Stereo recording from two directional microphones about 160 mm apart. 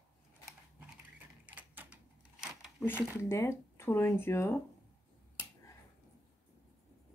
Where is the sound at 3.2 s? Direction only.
15° left (ahead or behind).